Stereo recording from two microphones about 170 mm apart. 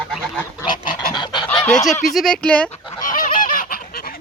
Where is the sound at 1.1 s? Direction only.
25° left (ahead or behind).